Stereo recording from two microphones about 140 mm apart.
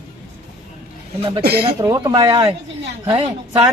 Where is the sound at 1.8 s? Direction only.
25° right (ahead or behind).